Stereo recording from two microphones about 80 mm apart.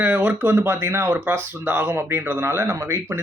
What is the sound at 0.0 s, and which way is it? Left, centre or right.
Speech, right.